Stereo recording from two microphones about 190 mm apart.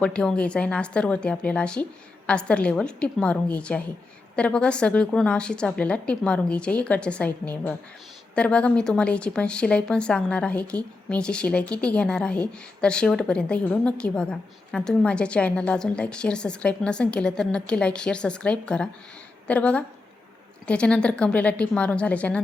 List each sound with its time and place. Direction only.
0.0 s a woman's voice: 5° left (ahead or behind)